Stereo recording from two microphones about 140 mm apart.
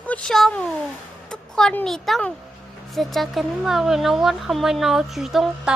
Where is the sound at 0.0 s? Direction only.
10° left (ahead or behind).